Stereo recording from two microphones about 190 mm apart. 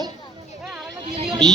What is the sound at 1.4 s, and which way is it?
Speech, 20° right (ahead or behind).